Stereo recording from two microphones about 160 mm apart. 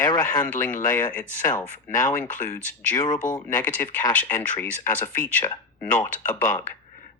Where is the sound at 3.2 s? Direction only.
55° left (ahead or behind).